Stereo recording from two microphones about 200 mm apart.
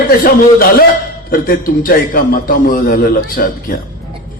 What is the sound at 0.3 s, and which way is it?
A man's voice, 45° left (ahead or behind).